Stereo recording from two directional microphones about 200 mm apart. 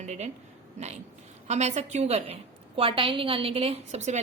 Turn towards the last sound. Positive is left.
turn(degrees=-35)  # may be behind; listen again after turning